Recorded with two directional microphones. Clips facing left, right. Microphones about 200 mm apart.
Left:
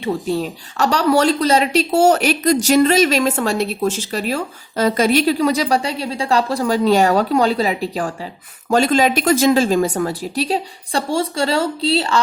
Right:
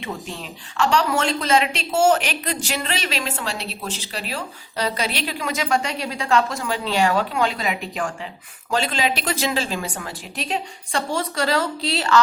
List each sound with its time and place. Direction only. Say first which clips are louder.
0.0 s a woman's voice: left 11 dB; 40° left (ahead or behind)